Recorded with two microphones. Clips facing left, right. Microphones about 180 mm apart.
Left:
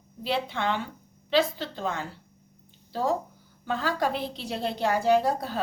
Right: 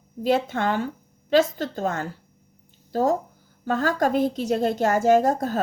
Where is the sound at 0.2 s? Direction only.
45° right (ahead or behind).